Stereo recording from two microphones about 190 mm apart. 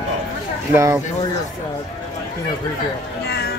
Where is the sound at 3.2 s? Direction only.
60° left (ahead or behind).